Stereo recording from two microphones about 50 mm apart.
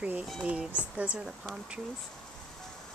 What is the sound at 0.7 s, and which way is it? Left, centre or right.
Speech, right.